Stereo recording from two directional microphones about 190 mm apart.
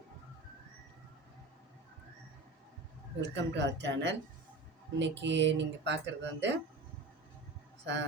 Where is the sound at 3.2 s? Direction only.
70° right (ahead or behind).